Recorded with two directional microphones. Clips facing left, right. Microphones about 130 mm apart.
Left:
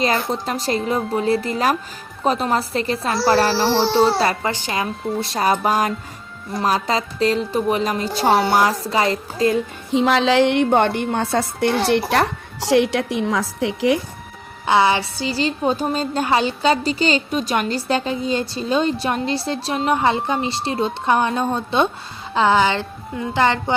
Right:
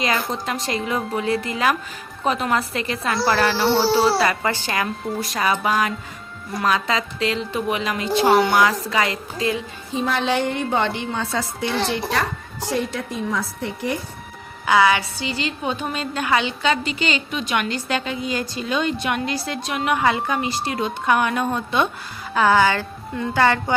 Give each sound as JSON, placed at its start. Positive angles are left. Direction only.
{"t": 0.3, "sound": "a woman's voice", "side_deg": 35}
{"t": 3.7, "sound": "music", "side_deg": 0}
{"t": 4.4, "sound": "a woman's voice", "side_deg": 20}
{"t": 5.2, "sound": "a woman's voice", "side_deg": 35}
{"t": 9.9, "sound": "a woman's voice", "side_deg": 85}
{"t": 12.1, "sound": "a woman's voice", "side_deg": 80}
{"t": 14.7, "sound": "a woman's voice", "side_deg": 25}